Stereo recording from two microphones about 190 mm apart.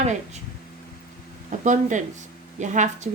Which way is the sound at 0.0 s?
40° right (ahead or behind).